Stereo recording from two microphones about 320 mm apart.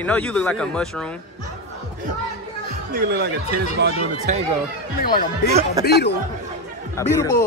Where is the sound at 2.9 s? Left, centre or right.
Right.